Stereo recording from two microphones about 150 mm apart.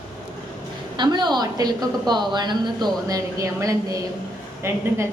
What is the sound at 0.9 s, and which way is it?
A woman's voice, 30° right (ahead or behind).